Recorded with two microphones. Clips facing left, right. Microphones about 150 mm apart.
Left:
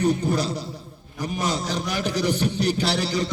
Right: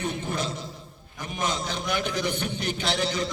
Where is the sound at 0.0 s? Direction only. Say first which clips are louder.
Left 8 dB; 40° left (ahead or behind).